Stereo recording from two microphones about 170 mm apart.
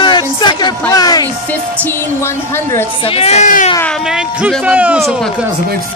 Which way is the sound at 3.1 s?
35° left (ahead or behind).